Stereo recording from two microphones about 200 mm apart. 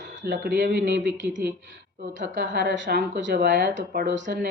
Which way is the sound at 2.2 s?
60° right (ahead or behind).